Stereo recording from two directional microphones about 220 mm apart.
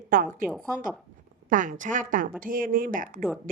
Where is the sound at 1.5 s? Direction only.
35° right (ahead or behind).